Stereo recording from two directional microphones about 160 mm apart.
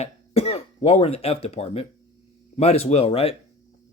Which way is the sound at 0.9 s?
40° left (ahead or behind).